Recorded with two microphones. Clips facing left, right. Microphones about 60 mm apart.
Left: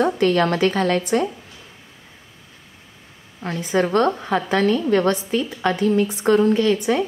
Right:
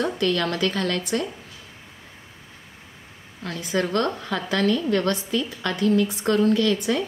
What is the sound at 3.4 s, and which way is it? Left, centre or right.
A woman's voice, left.